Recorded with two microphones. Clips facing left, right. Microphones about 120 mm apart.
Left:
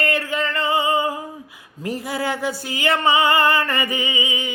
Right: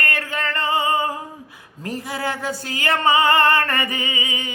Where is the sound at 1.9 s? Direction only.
15° left (ahead or behind).